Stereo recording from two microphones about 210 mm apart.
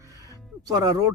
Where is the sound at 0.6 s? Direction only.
15° right (ahead or behind).